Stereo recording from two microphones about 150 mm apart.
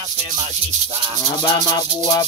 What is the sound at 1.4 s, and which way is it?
Maraca, 25° left (ahead or behind).